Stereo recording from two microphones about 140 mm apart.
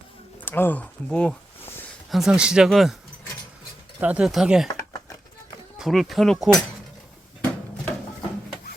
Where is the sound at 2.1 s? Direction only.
Centre (ahead or behind).